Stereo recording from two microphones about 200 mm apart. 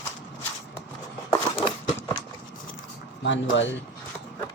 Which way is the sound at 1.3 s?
25° left (ahead or behind).